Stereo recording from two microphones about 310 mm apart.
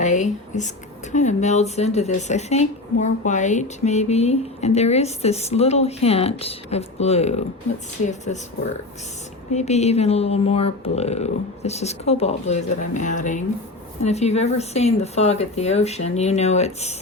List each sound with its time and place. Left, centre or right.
0.0 s a sound: left
1.1 s speech: left
9.5 s speech: left